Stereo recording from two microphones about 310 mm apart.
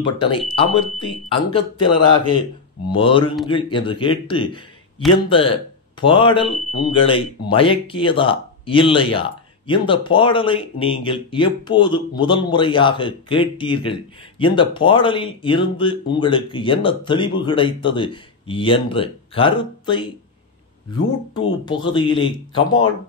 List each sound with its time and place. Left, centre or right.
0.0 s speech: centre
21.6 s speech: centre